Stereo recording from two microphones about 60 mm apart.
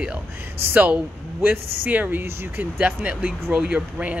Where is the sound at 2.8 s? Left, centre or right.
Right.